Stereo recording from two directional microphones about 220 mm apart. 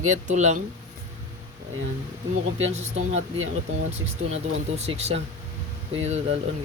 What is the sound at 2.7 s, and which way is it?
Speech, 30° right (ahead or behind).